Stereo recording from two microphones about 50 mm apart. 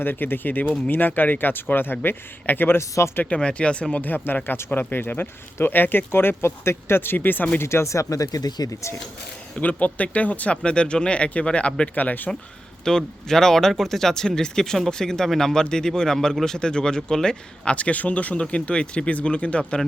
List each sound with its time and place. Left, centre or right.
0.0 s speech: left
2.7 s speech: left
3.2 s speech: left
4.0 s speech: left
7.6 s speech: left
9.6 s speech: left
10.6 s speech: centre; by 12.3 s left
12.8 s speech: centre